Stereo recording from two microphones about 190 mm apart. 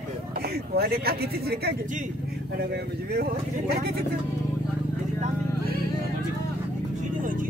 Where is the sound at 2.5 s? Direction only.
60° right (ahead or behind).